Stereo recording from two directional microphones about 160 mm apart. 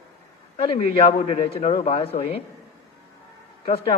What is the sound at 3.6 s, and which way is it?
Speech, 35° left (ahead or behind).